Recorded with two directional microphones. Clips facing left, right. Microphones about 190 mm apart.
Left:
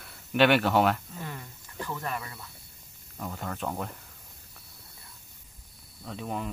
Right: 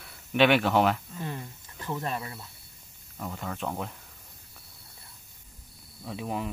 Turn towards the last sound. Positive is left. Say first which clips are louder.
# right 1 dB
turn(degrees=-5)  # may be behind; listen again after turning